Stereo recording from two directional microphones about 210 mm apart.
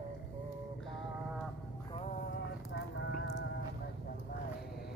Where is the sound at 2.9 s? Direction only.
60° left (ahead or behind).